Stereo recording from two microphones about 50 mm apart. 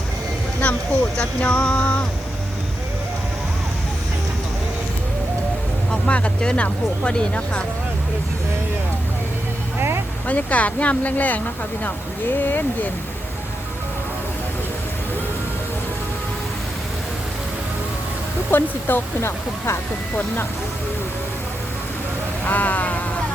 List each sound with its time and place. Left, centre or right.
0.6 s vehicle: left
1.4 s speech: left
5.9 s speech: left
10.2 s speech: left
18.5 s speech: left
22.4 s speech: left